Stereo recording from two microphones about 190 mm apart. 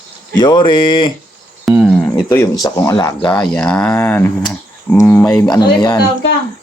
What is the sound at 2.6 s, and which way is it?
Speech, 15° left (ahead or behind).